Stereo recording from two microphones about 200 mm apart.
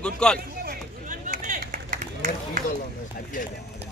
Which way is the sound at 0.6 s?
45° right (ahead or behind).